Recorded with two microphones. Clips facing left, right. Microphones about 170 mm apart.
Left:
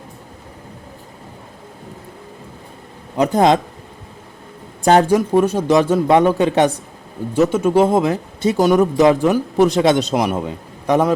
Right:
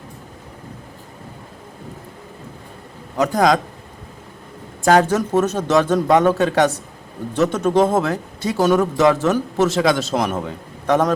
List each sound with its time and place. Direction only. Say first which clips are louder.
3.2 s speech: left 2 dB; 25° left (ahead or behind)
4.8 s speech: left 1 dB; 25° left (ahead or behind)
5.0 s speech: left 3 dB; 10° left (ahead or behind)